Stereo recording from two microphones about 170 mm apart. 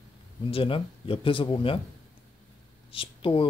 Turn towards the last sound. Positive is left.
turn(degrees=30)  # may be behind; listen again after turning